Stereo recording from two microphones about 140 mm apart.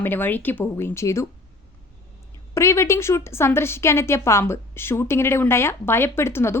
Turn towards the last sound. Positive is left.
turn(degrees=15)  # may be behind; listen again after turning